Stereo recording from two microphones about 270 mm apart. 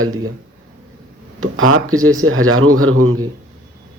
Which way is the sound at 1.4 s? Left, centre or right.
Right.